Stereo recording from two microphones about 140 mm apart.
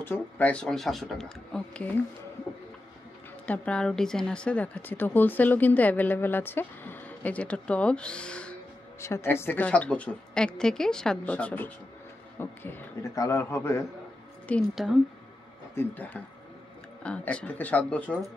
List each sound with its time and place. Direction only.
0.0 s speech: 10° left (ahead or behind)
3.4 s speech: 10° left (ahead or behind)
9.0 s speech: 20° left (ahead or behind)
15.7 s speech: 15° left (ahead or behind)